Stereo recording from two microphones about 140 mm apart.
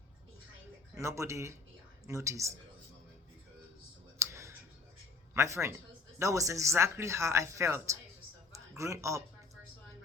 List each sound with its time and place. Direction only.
0.9 s speech: 20° right (ahead or behind)
4.2 s clicking: 20° right (ahead or behind)
5.3 s speech: 20° right (ahead or behind)